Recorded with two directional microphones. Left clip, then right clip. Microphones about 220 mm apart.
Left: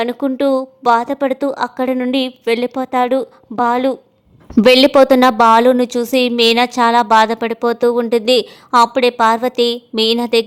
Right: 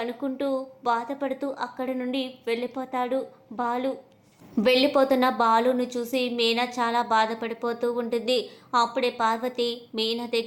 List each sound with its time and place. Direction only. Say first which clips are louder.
0.0 s a woman's voice: left 13 dB; 45° left (ahead or behind)